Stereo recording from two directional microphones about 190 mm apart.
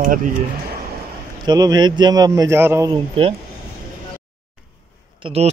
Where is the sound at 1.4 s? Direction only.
20° right (ahead or behind).